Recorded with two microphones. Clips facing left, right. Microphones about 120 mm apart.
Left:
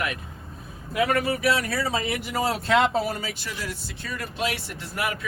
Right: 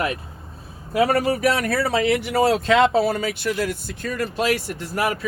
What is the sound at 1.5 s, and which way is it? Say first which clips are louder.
Speech: right 4 dB; 55° right (ahead or behind).